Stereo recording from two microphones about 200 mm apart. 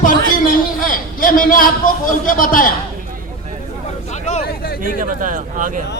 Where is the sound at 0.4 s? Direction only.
45° left (ahead or behind).